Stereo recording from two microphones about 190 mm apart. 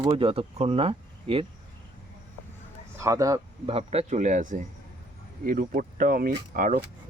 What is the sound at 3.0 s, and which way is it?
Speech, 15° right (ahead or behind).